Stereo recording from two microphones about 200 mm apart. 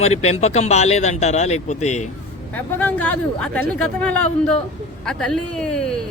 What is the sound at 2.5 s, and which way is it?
Speech, 10° left (ahead or behind).